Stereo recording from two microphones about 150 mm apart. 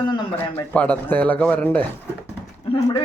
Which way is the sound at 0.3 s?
10° left (ahead or behind).